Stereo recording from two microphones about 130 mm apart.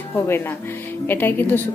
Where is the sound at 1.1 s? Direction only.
15° left (ahead or behind).